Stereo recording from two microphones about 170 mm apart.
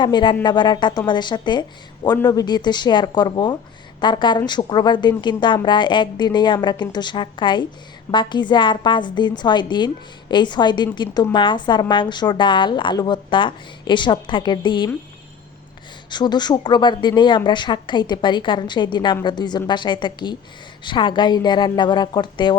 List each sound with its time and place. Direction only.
0.0 s a woman's voice: 25° left (ahead or behind)
16.0 s a woman's voice: 25° left (ahead or behind)